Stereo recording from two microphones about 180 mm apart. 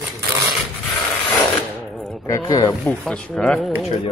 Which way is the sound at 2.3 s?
20° left (ahead or behind).